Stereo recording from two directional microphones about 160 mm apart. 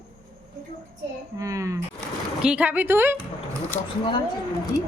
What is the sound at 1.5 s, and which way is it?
Speech, 20° right (ahead or behind).